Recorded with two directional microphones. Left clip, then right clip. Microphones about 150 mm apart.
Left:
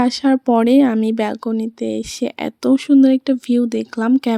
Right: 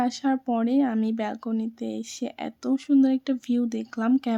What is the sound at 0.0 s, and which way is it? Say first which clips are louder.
Speech: left 9 dB; 45° left (ahead or behind).